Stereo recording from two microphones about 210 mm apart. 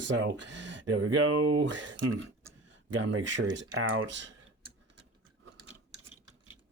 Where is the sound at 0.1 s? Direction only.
60° right (ahead or behind); by 1.5 s 80° right.